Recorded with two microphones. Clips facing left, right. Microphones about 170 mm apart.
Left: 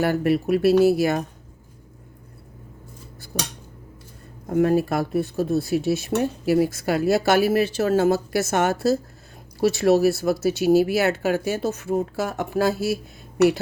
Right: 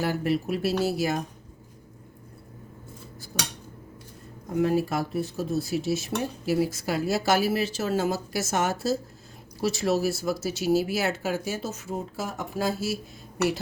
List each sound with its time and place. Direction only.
0.0 s speech: 60° left (ahead or behind)
3.3 s cutlery: 60° left (ahead or behind)
4.5 s speech: 55° left (ahead or behind)